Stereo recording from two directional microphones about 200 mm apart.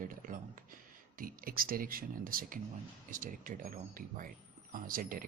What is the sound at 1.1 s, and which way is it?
Speech, 45° right (ahead or behind).